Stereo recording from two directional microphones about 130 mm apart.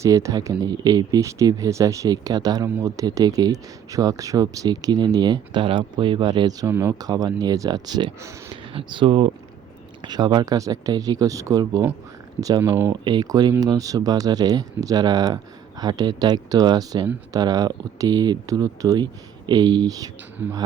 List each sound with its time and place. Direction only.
0.0 s speech: 25° right (ahead or behind); by 9.3 s 45° right (ahead or behind)
10.0 s speech: 35° right (ahead or behind)
12.9 s speech: 35° right (ahead or behind)